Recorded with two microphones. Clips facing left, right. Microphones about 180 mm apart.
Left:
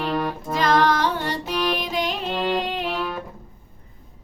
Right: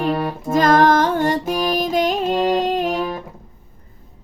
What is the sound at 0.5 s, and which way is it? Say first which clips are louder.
Music: right 6 dB; 45° right (ahead or behind).